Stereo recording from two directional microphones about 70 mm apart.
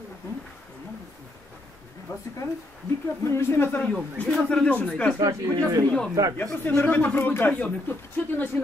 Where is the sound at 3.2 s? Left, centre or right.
Left.